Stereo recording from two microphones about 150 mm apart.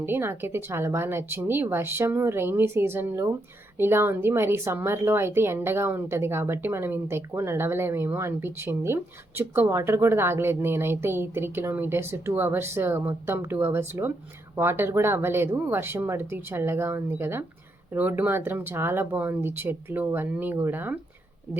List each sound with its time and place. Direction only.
0.0 s a woman's voice: 15° right (ahead or behind)